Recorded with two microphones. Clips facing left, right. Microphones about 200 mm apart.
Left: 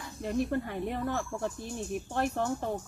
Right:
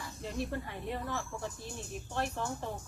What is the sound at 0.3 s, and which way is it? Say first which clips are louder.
Speech: left 7 dB; 55° left (ahead or behind).